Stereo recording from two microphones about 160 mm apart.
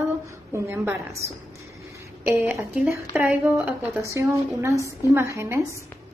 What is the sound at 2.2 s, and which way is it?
A woman's voice, 15° right (ahead or behind).